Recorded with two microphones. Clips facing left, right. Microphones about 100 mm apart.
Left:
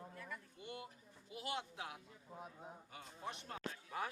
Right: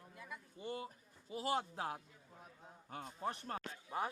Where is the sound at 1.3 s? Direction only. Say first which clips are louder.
Right 7 dB; 40° right (ahead or behind).